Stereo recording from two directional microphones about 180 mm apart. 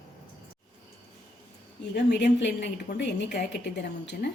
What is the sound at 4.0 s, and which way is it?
Speech, 75° left (ahead or behind).